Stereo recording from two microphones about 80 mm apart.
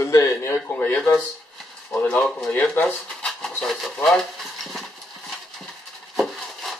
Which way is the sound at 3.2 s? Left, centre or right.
Centre.